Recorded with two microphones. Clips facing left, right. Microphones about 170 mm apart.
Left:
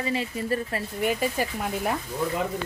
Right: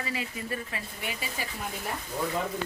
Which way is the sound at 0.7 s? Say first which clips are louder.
Left 11 dB; 45° left (ahead or behind).